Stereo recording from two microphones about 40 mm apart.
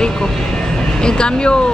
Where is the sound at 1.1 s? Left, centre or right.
Left.